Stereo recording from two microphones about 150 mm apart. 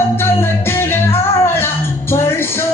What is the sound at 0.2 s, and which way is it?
Music, 15° left (ahead or behind).